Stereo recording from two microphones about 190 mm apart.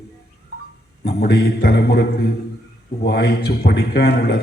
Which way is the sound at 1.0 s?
55° left (ahead or behind).